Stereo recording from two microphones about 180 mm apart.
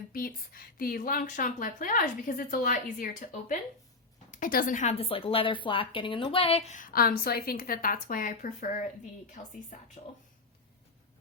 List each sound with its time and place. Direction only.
0.1 s a woman's voice: 55° left (ahead or behind)